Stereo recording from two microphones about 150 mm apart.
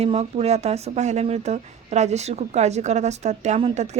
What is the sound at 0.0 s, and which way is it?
A woman's voice, 45° right (ahead or behind).